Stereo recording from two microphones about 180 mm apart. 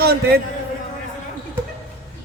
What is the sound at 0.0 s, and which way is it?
Speech, 60° right (ahead or behind).